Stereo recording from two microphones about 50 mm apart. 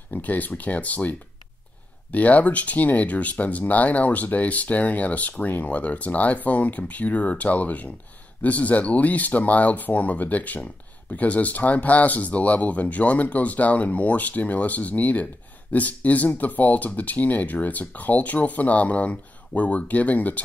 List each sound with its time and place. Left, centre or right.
0.1 s speech: left